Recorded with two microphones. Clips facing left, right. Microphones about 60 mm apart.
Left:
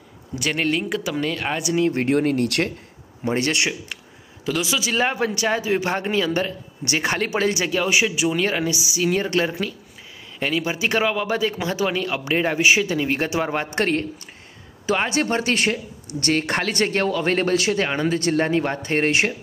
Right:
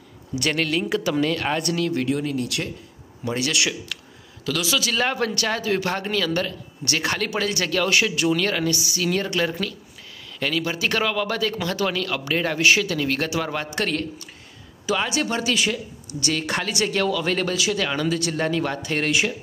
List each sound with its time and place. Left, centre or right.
0.3 s speech: centre
0.7 s speech: centre
1.8 s speech: left
2.0 s speech: left
3.3 s speech: left